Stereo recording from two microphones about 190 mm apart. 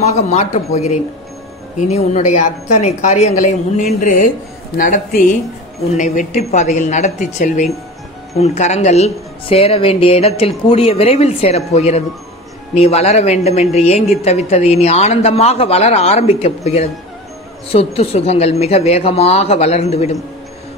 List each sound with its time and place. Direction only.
0.0 s speech: 35° left (ahead or behind)